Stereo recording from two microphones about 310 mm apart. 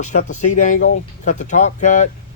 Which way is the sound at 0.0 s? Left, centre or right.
Left.